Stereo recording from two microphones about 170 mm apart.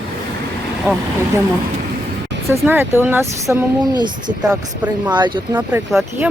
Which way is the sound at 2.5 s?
15° right (ahead or behind).